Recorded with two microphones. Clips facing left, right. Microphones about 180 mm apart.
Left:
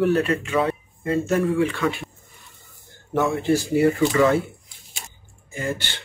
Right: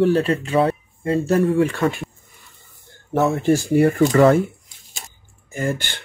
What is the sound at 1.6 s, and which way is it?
Speech, 45° right (ahead or behind).